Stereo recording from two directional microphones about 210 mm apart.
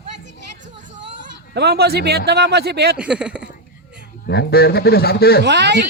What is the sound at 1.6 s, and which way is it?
A man's voice, 50° right (ahead or behind).